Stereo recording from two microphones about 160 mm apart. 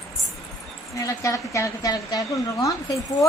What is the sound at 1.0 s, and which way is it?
A woman's voice, 20° left (ahead or behind).